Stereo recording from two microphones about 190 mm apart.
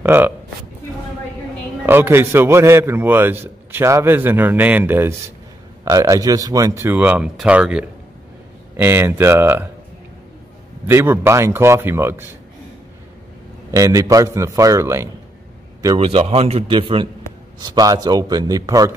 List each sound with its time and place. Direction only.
0.0 s a man's voice: 10° right (ahead or behind)
1.9 s a man's voice: 10° right (ahead or behind)
10.9 s a man's voice: 15° right (ahead or behind)
13.7 s a man's voice: 15° right (ahead or behind)
16.0 s speech: 30° right (ahead or behind)